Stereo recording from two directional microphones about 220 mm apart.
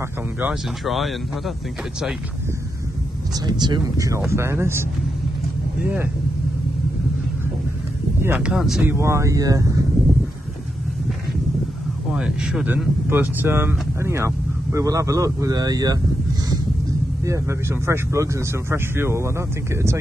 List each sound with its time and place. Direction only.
0.4 s speech: centre (ahead or behind)
3.3 s speech: 20° right (ahead or behind)
8.2 s speech: 5° right (ahead or behind)
12.1 s speech: 5° right (ahead or behind)
17.2 s speech: 15° right (ahead or behind)